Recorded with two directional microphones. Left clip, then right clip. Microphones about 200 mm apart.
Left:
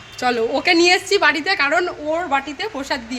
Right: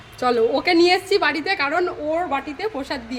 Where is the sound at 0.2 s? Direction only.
5° right (ahead or behind).